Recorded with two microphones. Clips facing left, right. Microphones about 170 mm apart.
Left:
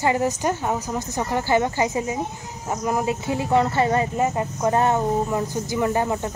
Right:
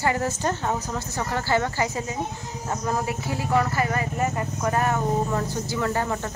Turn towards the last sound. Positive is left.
turn(degrees=15)  # may be behind; listen again after turning